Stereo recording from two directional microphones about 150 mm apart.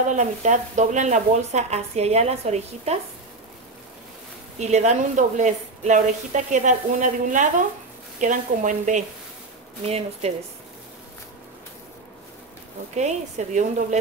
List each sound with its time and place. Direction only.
0.1 s speech: 55° right (ahead or behind)
4.6 s a woman's voice: 50° right (ahead or behind)
9.8 s speech: 45° right (ahead or behind)
12.9 s speech: 50° right (ahead or behind)